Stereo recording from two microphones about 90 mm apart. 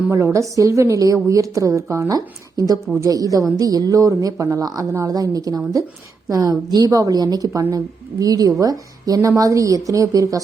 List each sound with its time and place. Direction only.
0.3 s a woman's voice: 40° right (ahead or behind)